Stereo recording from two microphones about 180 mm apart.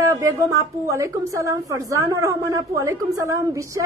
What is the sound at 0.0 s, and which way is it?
A woman's voice, 15° right (ahead or behind).